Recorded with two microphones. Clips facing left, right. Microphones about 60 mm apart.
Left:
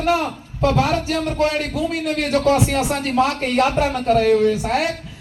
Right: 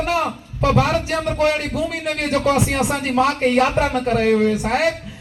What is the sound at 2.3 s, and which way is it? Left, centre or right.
Speech, right.